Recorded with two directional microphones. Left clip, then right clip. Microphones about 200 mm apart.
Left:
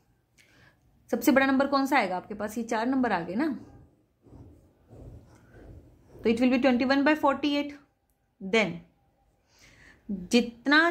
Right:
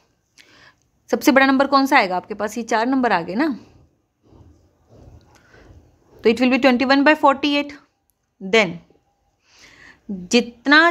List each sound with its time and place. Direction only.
0.4 s speech: 25° right (ahead or behind)
6.2 s speech: 25° right (ahead or behind)
9.5 s a sound: 25° right (ahead or behind)